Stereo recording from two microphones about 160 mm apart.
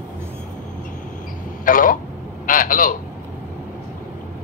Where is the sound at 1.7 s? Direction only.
60° left (ahead or behind).